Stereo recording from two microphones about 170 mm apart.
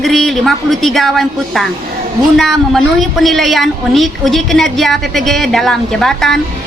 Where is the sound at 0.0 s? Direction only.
Centre (ahead or behind).